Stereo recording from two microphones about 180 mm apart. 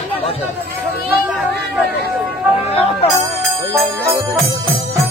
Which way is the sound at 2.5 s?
30° left (ahead or behind).